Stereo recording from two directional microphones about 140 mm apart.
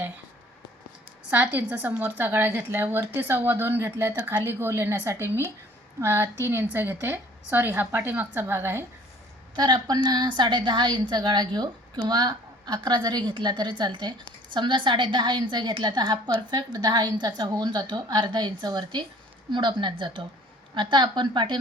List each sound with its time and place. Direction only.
1.3 s a woman's voice: 10° right (ahead or behind)
9.6 s a woman's voice: 30° right (ahead or behind)